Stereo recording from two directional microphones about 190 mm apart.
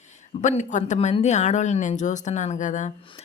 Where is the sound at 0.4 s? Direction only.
40° left (ahead or behind).